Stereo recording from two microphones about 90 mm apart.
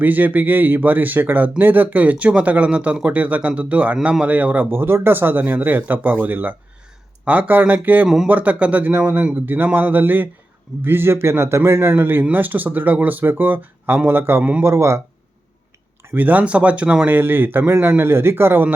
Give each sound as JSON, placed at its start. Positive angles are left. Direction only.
{"t": 0.0, "sound": "speech", "side_deg": -20}
{"t": 8.0, "sound": "speech", "side_deg": -5}
{"t": 8.3, "sound": "a man's voice", "side_deg": -15}
{"t": 16.0, "sound": "speech", "side_deg": -20}